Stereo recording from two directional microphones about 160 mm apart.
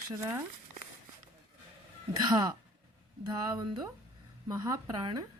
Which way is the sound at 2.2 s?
25° right (ahead or behind).